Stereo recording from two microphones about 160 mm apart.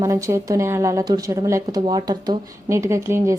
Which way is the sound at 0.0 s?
20° right (ahead or behind).